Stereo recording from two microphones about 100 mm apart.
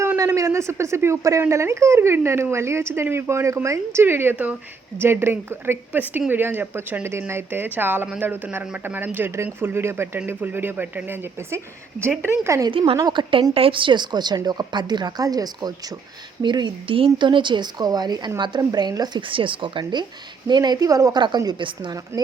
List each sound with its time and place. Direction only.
0.3 s speech: 30° right (ahead or behind)
12.7 s speech: 65° right (ahead or behind)
13.0 s a woman's voice: 45° right (ahead or behind)
13.5 s a woman's voice: 65° right (ahead or behind); by 19.2 s 45° right (ahead or behind)
19.3 s speech: 60° right (ahead or behind)
20.5 s a woman's voice: 40° right (ahead or behind)